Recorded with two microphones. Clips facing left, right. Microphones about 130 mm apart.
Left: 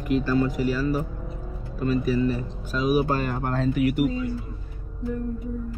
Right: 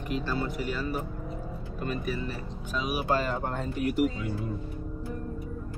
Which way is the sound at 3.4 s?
90° left.